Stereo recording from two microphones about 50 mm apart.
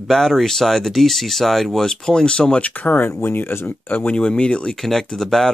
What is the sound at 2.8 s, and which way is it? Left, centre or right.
Speech, left.